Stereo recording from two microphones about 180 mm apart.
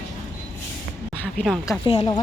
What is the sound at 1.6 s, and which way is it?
Speech, 30° left (ahead or behind).